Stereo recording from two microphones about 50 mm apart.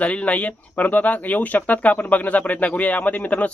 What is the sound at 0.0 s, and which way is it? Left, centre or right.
Speech, left.